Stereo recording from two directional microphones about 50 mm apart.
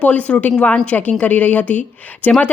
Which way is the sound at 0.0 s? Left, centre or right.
Left.